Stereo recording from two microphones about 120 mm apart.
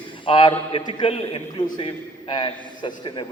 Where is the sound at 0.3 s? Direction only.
45° left (ahead or behind).